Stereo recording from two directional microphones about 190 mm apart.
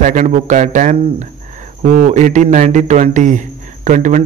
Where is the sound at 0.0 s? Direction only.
40° right (ahead or behind).